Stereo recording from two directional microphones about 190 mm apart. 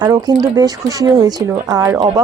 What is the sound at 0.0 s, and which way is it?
Speech, 20° right (ahead or behind).